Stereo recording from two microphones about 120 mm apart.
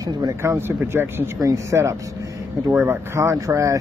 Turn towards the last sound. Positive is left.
turn(degrees=-25)  # may be behind; listen again after turning